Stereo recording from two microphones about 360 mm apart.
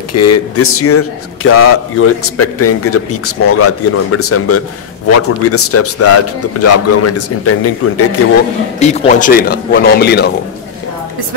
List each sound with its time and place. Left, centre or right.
0.1 s a man's voice: left
8.7 s speech: centre